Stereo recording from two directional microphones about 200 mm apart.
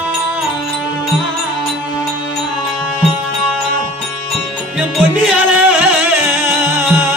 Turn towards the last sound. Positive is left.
turn(degrees=-10)  # may be behind; listen again after turning